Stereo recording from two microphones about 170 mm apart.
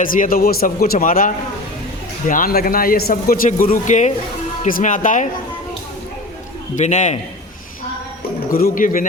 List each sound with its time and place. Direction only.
0.0 s speech: 55° left (ahead or behind)
6.7 s speech: 45° left (ahead or behind)
8.4 s speech: 55° left (ahead or behind)